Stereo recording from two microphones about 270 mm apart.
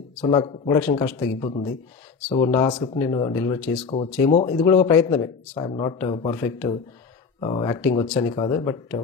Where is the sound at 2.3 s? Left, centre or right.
Centre.